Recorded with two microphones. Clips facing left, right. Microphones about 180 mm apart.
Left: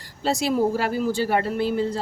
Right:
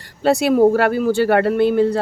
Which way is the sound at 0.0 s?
60° right (ahead or behind).